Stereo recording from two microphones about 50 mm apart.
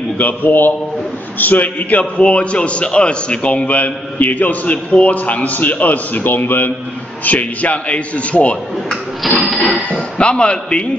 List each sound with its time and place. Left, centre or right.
0.2 s a man's voice: left
7.2 s a man's voice: left
9.2 s a sound: centre
9.8 s a man's voice: left